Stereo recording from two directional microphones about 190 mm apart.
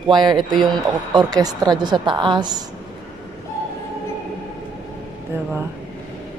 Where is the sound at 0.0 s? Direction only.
25° right (ahead or behind).